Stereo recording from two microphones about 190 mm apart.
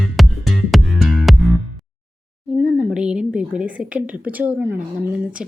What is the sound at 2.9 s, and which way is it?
A woman's voice, 5° right (ahead or behind).